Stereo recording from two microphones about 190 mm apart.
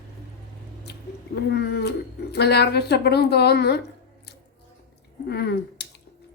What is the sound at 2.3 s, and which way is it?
A woman's voice, 60° left (ahead or behind).